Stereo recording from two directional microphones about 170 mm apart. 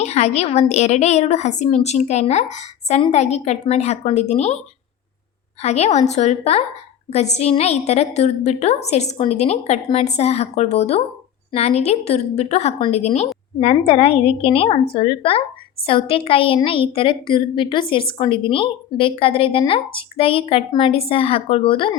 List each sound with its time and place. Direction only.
0.0 s a woman's voice: 40° left (ahead or behind)
5.6 s a woman's voice: 40° left (ahead or behind)